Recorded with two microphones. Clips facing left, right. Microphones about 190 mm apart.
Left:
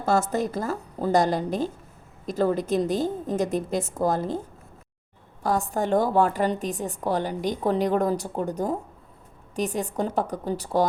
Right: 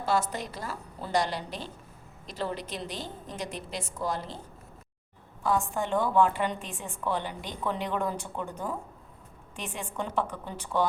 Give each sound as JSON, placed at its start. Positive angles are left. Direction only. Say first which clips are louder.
{"t": 0.0, "sound": "a woman's voice", "louder": "left 6 dB", "side_deg": 45}
{"t": 5.4, "sound": "a woman's voice", "louder": "left 3 dB", "side_deg": 40}